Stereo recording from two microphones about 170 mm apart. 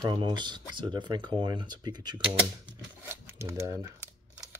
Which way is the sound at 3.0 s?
15° right (ahead or behind).